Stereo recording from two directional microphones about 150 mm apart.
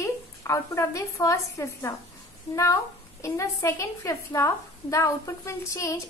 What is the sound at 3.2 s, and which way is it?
A woman's voice, 20° left (ahead or behind).